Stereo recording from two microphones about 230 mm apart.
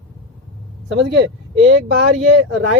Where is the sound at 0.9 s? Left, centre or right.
Right.